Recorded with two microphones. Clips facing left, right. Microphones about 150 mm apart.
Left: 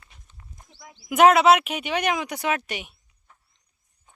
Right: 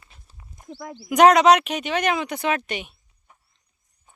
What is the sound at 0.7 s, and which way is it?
Speech, 65° right (ahead or behind).